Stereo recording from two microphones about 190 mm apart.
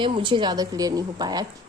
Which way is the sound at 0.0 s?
25° right (ahead or behind).